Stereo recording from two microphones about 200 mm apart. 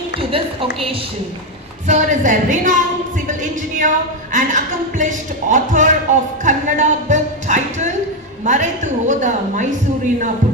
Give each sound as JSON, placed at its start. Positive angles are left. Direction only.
{"t": 0.2, "sound": "speech", "side_deg": -25}
{"t": 1.9, "sound": "a woman's voice", "side_deg": -40}